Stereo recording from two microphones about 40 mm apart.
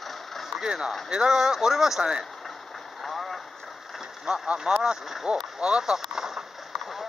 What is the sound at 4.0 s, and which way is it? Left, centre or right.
Vehicle, centre.